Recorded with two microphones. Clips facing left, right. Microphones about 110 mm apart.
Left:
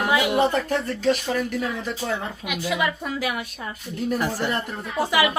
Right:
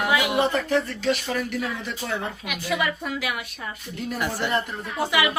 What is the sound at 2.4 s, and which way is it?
Speech, 20° left (ahead or behind).